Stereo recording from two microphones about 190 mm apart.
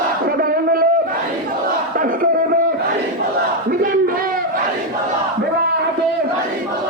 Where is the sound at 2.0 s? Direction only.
45° right (ahead or behind).